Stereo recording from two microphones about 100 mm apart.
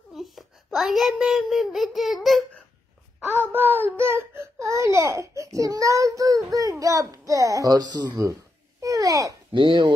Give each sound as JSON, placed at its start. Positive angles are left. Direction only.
{"t": 0.1, "sound": "a child's voice", "side_deg": 0}
{"t": 3.3, "sound": "speech", "side_deg": -20}
{"t": 8.8, "sound": "a sound", "side_deg": -35}
{"t": 9.5, "sound": "speech", "side_deg": -50}